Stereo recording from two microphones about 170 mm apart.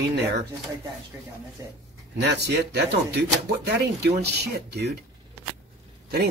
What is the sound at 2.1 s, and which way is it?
Speech, 80° right.